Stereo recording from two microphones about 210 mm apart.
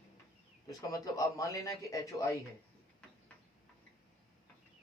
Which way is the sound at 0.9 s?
15° left (ahead or behind).